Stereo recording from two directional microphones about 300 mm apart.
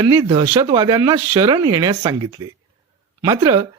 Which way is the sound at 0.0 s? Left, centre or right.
Centre.